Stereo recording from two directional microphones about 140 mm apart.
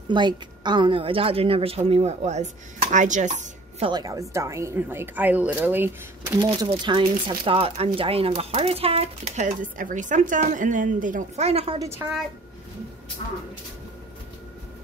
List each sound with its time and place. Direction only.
0.1 s a woman's voice: 35° right (ahead or behind); by 3.4 s 60° right (ahead or behind)
3.8 s a woman's voice: 30° right (ahead or behind)
6.4 s speech: 30° right (ahead or behind); by 11.8 s 45° right (ahead or behind)
11.8 s speech: 20° right (ahead or behind)